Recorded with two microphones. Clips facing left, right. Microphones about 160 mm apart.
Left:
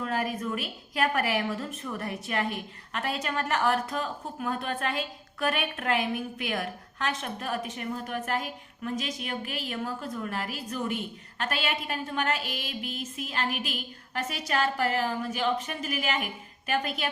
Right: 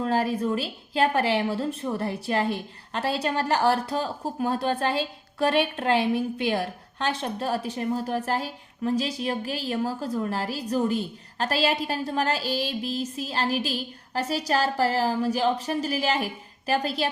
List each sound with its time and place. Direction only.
0.0 s a woman's voice: 30° right (ahead or behind)